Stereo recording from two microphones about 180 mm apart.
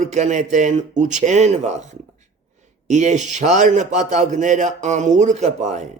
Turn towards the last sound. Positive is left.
turn(degrees=-40)  # may be behind; listen again after turning